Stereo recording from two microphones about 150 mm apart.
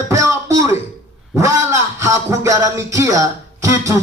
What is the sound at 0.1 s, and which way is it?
Throat clearing, 20° right (ahead or behind).